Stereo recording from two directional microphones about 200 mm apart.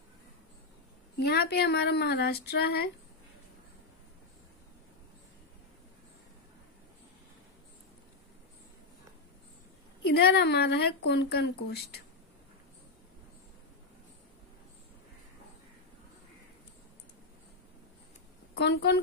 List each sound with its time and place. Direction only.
1.2 s speech: 55° left (ahead or behind)
10.0 s speech: 55° left (ahead or behind)
18.5 s a woman's voice: 55° left (ahead or behind)